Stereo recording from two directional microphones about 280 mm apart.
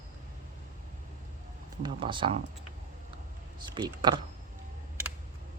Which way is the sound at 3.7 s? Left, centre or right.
Centre.